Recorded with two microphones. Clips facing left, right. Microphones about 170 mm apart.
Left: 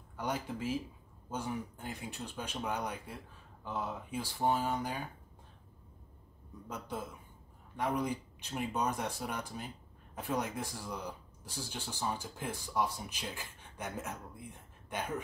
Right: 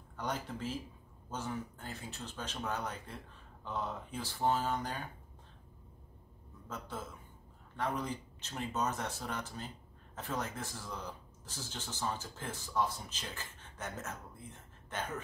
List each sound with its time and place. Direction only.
0.2 s speech: 10° left (ahead or behind)
6.7 s speech: 15° left (ahead or behind)